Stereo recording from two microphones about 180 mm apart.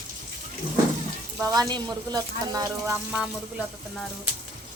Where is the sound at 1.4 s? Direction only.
20° right (ahead or behind).